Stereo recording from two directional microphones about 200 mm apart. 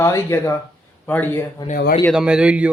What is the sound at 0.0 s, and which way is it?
Speech, 15° left (ahead or behind).